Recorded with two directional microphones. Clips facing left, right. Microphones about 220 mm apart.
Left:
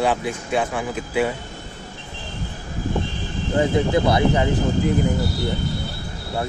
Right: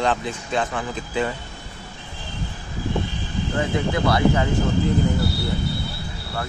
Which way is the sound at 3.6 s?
20° left (ahead or behind).